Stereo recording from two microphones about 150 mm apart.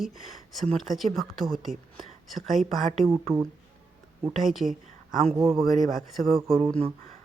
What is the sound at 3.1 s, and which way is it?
Speech, 20° right (ahead or behind).